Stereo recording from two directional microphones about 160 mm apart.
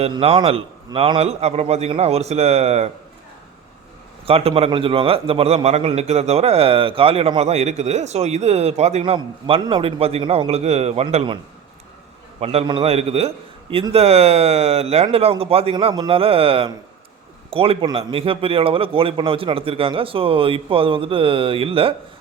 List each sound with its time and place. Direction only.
0.0 s a man's voice: 40° right (ahead or behind)
4.3 s a man's voice: 35° right (ahead or behind)
12.4 s a man's voice: 40° right (ahead or behind)